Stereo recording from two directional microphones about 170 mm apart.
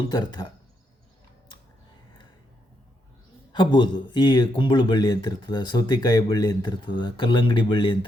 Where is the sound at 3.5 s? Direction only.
25° left (ahead or behind).